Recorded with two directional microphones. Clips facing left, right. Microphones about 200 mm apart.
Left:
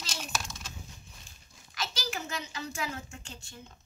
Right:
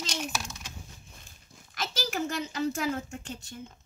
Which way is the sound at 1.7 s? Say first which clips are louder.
Right 4 dB; 50° right (ahead or behind).